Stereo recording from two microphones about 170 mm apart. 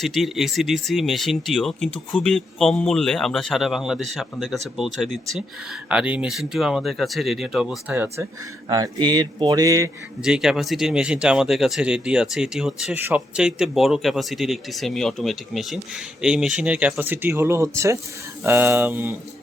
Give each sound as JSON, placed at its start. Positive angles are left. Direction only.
{"t": 0.0, "sound": "speech", "side_deg": 0}
{"t": 8.7, "sound": "speech", "side_deg": -25}
{"t": 10.2, "sound": "speech", "side_deg": -5}